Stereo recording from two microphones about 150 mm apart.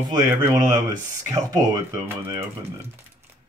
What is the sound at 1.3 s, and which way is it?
Speech, 25° right (ahead or behind).